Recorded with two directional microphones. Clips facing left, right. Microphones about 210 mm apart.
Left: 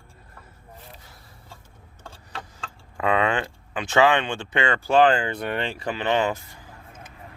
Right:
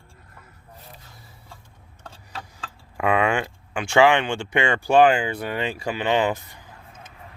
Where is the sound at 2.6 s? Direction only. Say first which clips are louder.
Right 1 dB; 10° right (ahead or behind).